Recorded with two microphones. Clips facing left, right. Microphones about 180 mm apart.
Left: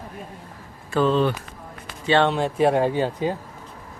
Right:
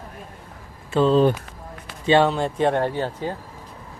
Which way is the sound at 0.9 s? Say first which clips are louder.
Right 3 dB; 35° right (ahead or behind).